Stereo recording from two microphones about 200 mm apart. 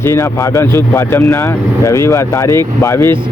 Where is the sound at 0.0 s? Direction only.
15° left (ahead or behind).